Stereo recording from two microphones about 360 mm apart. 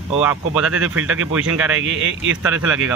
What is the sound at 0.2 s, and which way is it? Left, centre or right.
Speech, centre.